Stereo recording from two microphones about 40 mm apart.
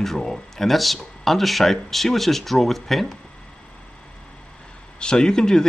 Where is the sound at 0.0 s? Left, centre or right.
Centre.